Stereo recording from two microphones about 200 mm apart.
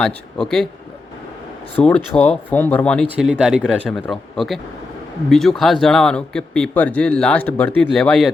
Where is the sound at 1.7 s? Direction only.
10° left (ahead or behind).